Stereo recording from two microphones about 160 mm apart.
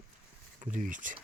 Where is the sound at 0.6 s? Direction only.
55° right (ahead or behind).